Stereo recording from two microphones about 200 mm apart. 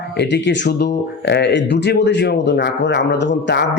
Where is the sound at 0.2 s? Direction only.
60° left (ahead or behind).